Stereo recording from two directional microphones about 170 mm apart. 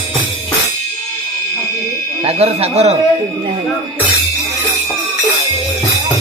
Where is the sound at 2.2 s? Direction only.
35° right (ahead or behind).